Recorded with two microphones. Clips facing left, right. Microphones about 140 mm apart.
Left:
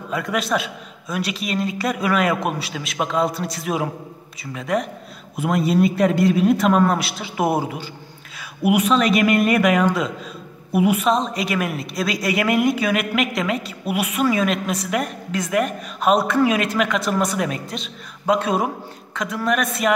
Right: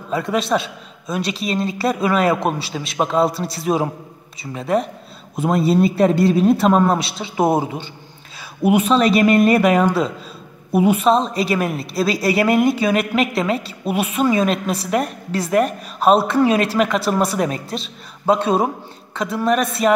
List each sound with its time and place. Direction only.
0.1 s a man's voice: 25° right (ahead or behind)